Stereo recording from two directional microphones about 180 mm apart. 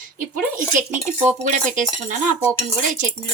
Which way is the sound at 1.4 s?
45° right (ahead or behind).